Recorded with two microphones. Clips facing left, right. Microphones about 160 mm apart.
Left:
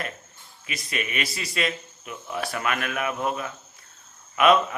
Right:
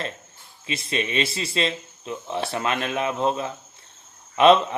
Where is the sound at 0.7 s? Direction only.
25° right (ahead or behind).